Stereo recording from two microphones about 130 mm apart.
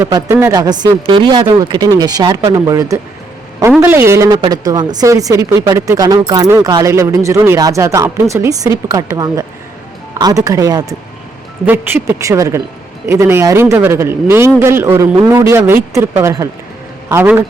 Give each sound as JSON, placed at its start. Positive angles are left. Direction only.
{"t": 0.0, "sound": "speech", "side_deg": -20}
{"t": 4.3, "sound": "speech", "side_deg": -30}
{"t": 11.6, "sound": "speech", "side_deg": -15}